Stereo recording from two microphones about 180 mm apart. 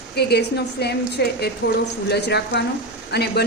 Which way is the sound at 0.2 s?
65° left (ahead or behind).